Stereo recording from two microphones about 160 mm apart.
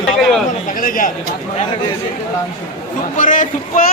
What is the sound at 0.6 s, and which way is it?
Speech, 60° left (ahead or behind).